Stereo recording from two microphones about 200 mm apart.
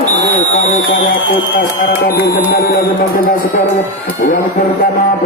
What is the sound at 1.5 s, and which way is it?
Music, 45° left (ahead or behind).